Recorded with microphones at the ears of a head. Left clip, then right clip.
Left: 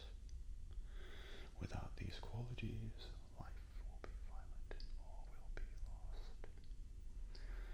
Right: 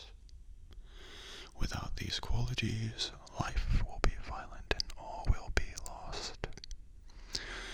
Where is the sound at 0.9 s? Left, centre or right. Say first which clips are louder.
Right 10 dB; right.